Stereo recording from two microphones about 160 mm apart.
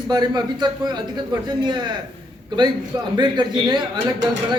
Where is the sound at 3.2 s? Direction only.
30° right (ahead or behind).